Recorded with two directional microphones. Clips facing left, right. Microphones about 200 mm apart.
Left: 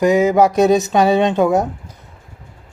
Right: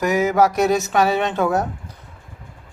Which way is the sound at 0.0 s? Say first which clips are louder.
Left 4 dB; 20° left (ahead or behind).